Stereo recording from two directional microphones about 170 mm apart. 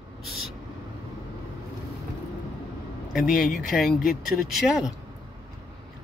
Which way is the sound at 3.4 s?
Centre (ahead or behind).